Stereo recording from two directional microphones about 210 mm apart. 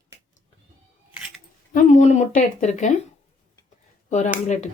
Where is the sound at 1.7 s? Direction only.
35° left (ahead or behind).